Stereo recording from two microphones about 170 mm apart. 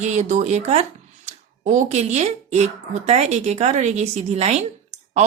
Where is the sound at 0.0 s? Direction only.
45° right (ahead or behind).